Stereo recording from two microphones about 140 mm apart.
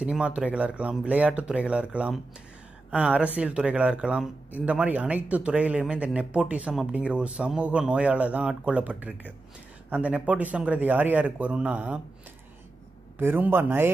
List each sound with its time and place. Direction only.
0.0 s speech: 5° right (ahead or behind)
13.2 s speech: 15° right (ahead or behind)